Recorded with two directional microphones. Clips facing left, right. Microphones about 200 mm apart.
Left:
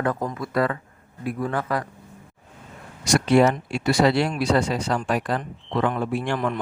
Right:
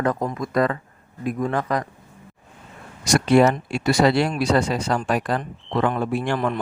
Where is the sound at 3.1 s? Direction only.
45° right (ahead or behind).